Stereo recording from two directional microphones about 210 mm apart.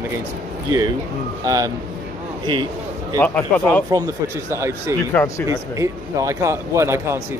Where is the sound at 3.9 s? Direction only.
15° right (ahead or behind).